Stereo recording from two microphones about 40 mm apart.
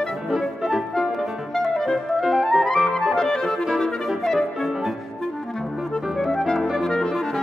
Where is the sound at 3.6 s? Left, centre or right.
Centre.